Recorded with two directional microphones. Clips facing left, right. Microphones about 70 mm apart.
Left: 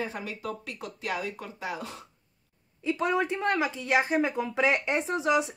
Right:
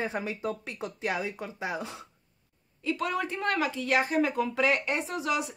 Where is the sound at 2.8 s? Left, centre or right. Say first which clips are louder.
Left 3 dB; left.